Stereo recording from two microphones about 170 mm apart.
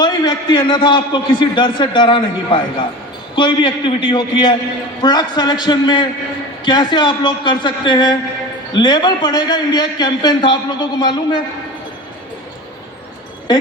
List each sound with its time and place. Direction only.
0.0 s a man's voice: 25° left (ahead or behind)